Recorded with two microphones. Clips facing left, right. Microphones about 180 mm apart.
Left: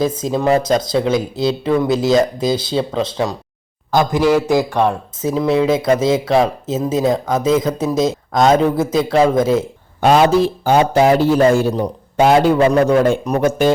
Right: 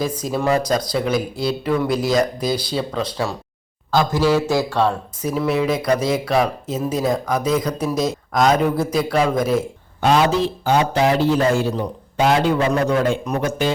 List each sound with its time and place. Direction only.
0.0 s a man's voice: 25° left (ahead or behind)
10.7 s a man's voice: 45° left (ahead or behind)